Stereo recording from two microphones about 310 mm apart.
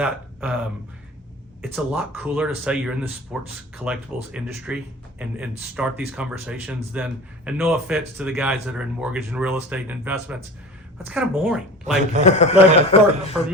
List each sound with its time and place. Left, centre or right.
0.0 s speech: centre
1.7 s speech: centre
12.2 s a man's voice: left